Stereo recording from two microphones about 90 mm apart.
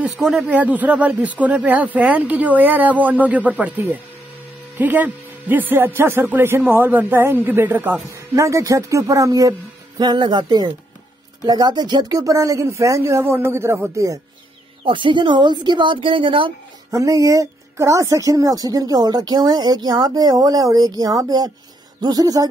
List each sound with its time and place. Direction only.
0.2 s speech: 5° right (ahead or behind)
0.5 s speech: 15° right (ahead or behind)
8.4 s speech: 35° right (ahead or behind)
9.9 s speech: 55° right (ahead or behind); by 14.2 s 35° right (ahead or behind)
14.9 s speech: 65° right (ahead or behind)
16.9 s speech: 40° right (ahead or behind)